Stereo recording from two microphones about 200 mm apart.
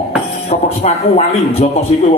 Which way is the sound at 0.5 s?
30° left (ahead or behind).